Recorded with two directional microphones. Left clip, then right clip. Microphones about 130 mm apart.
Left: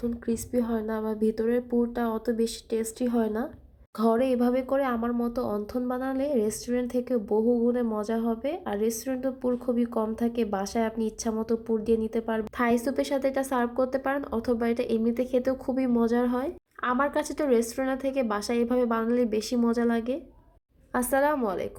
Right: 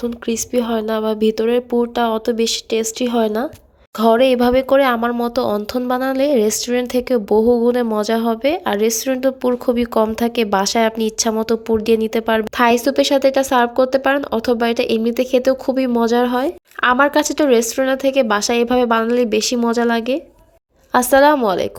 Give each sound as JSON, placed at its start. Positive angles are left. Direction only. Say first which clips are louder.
{"t": 0.0, "sound": "a woman's voice", "louder": "right 9 dB", "side_deg": -10}